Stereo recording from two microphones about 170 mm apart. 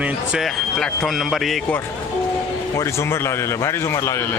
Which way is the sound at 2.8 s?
15° left (ahead or behind).